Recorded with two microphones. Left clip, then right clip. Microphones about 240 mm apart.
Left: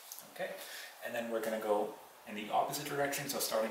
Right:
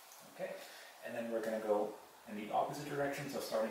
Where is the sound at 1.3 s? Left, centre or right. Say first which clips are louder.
Left 1 dB; centre.